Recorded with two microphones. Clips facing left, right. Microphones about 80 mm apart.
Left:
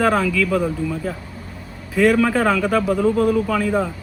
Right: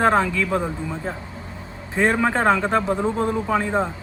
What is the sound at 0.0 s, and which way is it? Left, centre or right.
Speech, right.